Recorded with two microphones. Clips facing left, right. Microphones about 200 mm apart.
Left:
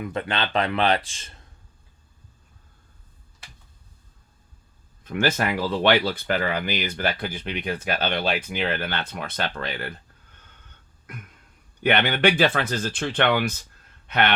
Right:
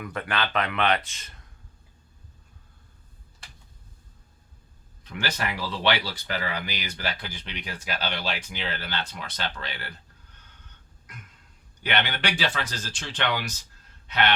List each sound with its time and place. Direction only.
0.0 s speech: 25° left (ahead or behind)
5.0 s speech: 50° left (ahead or behind)
11.8 s speech: 55° left (ahead or behind)